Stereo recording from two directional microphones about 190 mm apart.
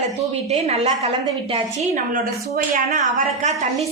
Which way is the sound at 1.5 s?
30° right (ahead or behind).